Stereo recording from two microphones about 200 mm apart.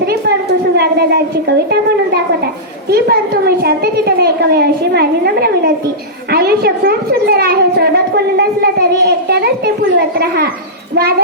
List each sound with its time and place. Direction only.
0.0 s a sound: 55° right (ahead or behind)
0.8 s a child's voice: 50° right (ahead or behind)
2.9 s a child's voice: 50° right (ahead or behind)